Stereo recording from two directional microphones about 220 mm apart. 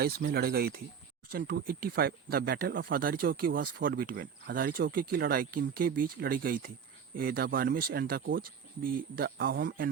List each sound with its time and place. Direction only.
0.0 s speech: 45° right (ahead or behind)